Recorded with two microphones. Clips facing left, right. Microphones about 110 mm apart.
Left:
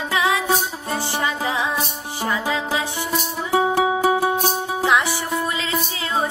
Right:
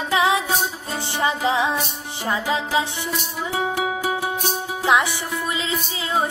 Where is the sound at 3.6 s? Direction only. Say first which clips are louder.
Left 6 dB; 30° left (ahead or behind).